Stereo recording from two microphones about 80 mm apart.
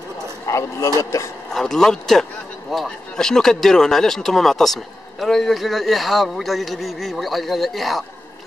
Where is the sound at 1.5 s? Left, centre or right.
Centre.